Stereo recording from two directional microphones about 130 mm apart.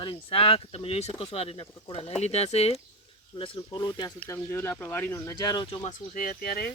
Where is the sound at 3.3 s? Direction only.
45° left (ahead or behind).